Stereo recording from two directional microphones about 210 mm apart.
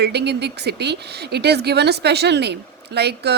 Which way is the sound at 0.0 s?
50° right (ahead or behind).